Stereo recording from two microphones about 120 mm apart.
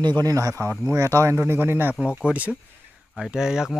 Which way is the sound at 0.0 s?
35° right (ahead or behind).